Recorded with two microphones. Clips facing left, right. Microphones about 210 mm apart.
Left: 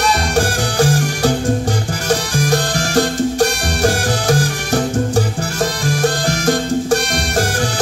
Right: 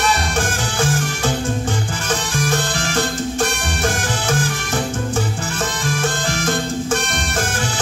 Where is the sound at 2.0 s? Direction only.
40° left (ahead or behind).